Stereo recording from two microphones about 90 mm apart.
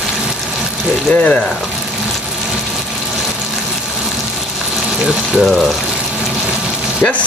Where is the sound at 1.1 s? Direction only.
15° left (ahead or behind).